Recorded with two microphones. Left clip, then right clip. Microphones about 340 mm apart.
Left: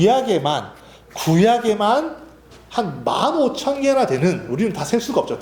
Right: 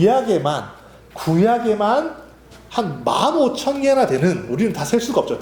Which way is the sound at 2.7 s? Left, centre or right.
Centre.